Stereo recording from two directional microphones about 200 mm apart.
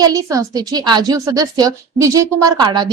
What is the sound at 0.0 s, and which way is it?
A woman's voice, 15° right (ahead or behind).